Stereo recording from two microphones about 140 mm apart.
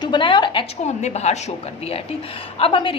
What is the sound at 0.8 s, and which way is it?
A woman's voice, 50° left (ahead or behind).